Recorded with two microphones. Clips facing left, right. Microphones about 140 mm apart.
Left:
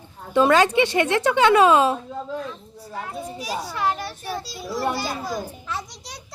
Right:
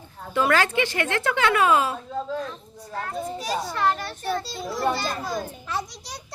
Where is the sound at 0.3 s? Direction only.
20° left (ahead or behind).